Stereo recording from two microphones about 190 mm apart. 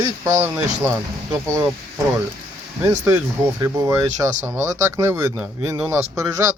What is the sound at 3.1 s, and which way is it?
A man's voice, 15° right (ahead or behind).